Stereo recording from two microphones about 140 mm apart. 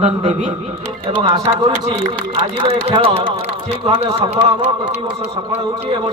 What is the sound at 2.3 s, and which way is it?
Speech, 50° right (ahead or behind).